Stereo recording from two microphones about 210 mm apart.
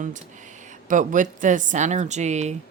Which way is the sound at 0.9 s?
40° right (ahead or behind).